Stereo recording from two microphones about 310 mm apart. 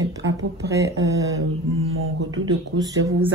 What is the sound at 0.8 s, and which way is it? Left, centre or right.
Speech, centre.